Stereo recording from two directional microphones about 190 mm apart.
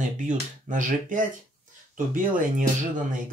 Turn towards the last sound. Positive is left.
turn(degrees=-40)  # may be behind; listen again after turning